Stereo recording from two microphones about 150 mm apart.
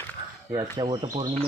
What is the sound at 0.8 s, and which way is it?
Speech, 30° right (ahead or behind).